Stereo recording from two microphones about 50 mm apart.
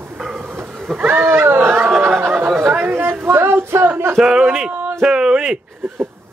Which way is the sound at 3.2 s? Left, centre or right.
Right.